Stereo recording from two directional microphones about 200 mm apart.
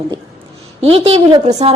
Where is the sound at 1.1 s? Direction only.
30° right (ahead or behind).